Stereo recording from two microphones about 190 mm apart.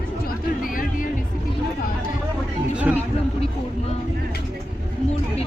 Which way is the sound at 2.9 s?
5° right (ahead or behind).